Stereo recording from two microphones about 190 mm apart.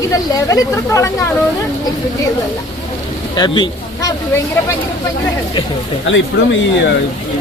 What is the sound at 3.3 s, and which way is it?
Speech, 20° left (ahead or behind).